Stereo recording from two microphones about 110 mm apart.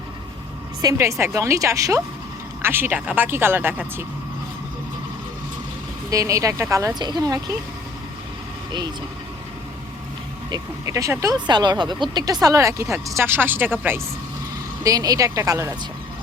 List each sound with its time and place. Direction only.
0.9 s speech: 25° right (ahead or behind)
6.1 s speech: 30° right (ahead or behind)
7.0 s speech: 40° right (ahead or behind)
10.8 s speech: 25° right (ahead or behind)
11.3 s speech: 40° right (ahead or behind); by 14.0 s 20° right (ahead or behind)
14.8 s speech: 35° right (ahead or behind)